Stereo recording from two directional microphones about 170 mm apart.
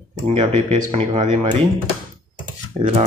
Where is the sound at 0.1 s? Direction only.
40° right (ahead or behind).